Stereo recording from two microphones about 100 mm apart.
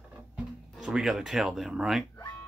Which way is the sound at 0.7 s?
5° right (ahead or behind).